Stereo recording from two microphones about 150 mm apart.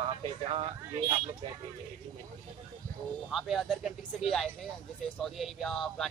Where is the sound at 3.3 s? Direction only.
Centre (ahead or behind).